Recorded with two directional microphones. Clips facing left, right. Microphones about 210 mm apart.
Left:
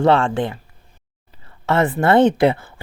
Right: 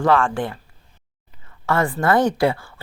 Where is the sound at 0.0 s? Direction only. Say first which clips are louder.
Left 3 dB; 25° left (ahead or behind).